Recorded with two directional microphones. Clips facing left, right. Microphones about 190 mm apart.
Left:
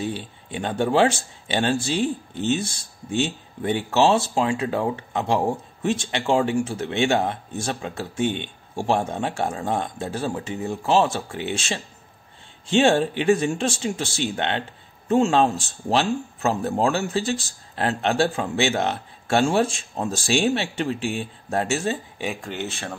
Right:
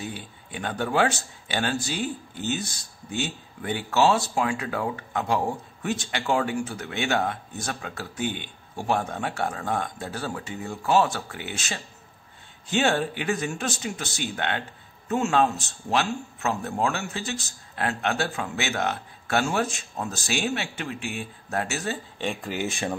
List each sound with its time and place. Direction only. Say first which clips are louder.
0.0 s speech: left 7 dB; 25° left (ahead or behind)
22.2 s speech: right 3 dB; 5° left (ahead or behind)
22.5 s speech: right 2 dB; 10° right (ahead or behind)